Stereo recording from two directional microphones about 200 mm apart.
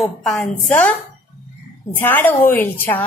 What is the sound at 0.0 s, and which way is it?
Speech, 5° left (ahead or behind).